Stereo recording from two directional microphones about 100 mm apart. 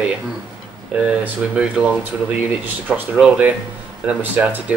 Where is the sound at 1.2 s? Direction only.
10° right (ahead or behind).